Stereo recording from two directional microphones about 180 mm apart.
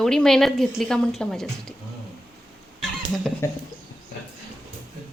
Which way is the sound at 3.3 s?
5° left (ahead or behind).